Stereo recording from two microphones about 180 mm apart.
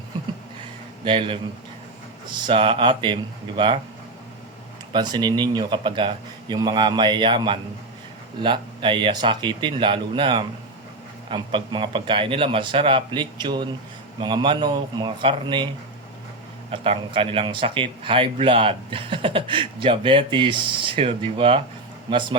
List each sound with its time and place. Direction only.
1.0 s speech: 30° right (ahead or behind)
4.9 s speech: 25° right (ahead or behind)
16.7 s speech: 30° right (ahead or behind)